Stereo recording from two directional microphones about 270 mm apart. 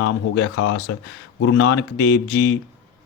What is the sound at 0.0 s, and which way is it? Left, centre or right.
Speech, left.